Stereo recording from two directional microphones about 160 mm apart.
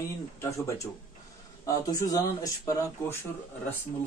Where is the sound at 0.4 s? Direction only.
20° left (ahead or behind).